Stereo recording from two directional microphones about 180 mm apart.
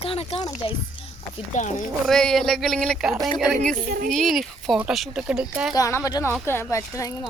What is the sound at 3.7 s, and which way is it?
Child singing, 50° right (ahead or behind).